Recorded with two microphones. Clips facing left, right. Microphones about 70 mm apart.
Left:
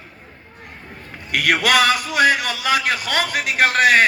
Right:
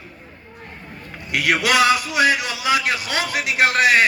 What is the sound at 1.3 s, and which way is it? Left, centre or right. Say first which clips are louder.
A man's voice: left 1 dB; left.